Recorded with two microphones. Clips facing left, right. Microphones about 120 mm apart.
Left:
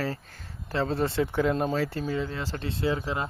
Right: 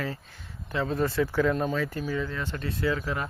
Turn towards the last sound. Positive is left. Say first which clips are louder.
# left 1 dB
turn(degrees=25)  # may be behind; listen again after turning